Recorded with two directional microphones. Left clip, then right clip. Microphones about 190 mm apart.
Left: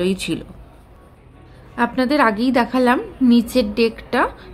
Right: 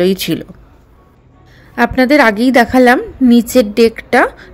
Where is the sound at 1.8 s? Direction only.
35° right (ahead or behind).